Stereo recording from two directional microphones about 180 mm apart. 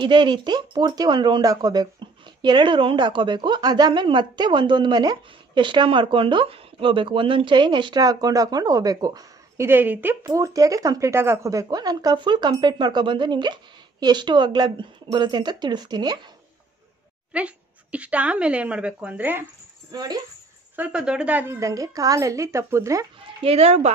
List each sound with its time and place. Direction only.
0.0 s a woman's voice: 25° right (ahead or behind)
17.3 s a woman's voice: 5° right (ahead or behind)
19.9 s a woman's voice: 20° right (ahead or behind)
20.7 s a woman's voice: 5° right (ahead or behind)
23.4 s speech: 35° right (ahead or behind)